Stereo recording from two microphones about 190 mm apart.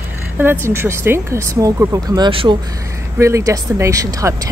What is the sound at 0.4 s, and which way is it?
Speech, 10° right (ahead or behind).